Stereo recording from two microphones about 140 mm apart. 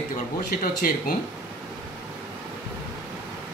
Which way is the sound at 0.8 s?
90° left.